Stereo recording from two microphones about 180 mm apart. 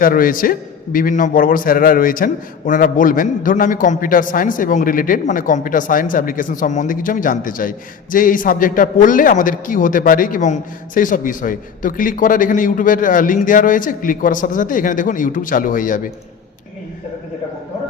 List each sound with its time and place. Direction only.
0.0 s a man's voice: 50° left (ahead or behind)